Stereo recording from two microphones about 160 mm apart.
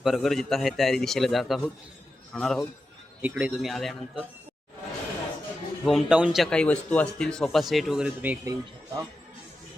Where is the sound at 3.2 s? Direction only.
10° right (ahead or behind).